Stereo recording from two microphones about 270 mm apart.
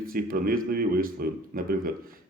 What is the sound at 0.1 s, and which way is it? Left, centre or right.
Speech, right.